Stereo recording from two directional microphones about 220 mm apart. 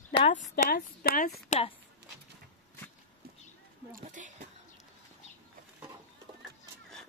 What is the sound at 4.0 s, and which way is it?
Speech, 35° right (ahead or behind).